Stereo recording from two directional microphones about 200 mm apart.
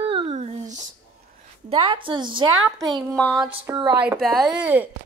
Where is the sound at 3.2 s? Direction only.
Centre (ahead or behind).